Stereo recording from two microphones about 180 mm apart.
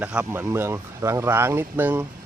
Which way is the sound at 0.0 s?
5° right (ahead or behind).